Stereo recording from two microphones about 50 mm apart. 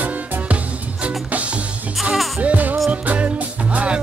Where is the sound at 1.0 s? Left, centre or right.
Right.